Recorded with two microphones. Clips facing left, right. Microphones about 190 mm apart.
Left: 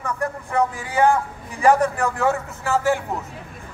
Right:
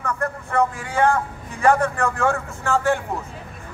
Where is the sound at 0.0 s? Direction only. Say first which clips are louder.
Even; 15° left (ahead or behind).